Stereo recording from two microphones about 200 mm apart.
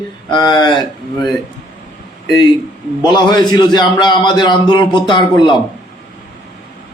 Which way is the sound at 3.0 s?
25° left (ahead or behind).